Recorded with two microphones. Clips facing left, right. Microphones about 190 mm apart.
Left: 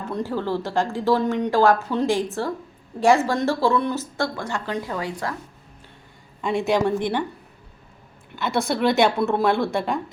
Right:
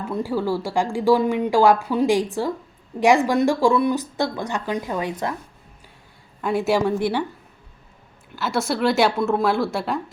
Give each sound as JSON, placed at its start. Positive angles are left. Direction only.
{"t": 0.0, "sound": "speech", "side_deg": -10}
{"t": 6.4, "sound": "speech", "side_deg": -5}
{"t": 8.4, "sound": "a woman's voice", "side_deg": 0}